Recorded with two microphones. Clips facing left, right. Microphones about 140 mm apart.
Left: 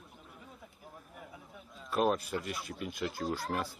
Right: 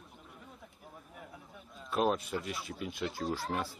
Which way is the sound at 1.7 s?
Centre (ahead or behind).